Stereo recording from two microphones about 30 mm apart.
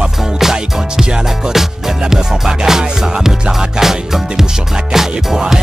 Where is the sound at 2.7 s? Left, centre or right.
Centre.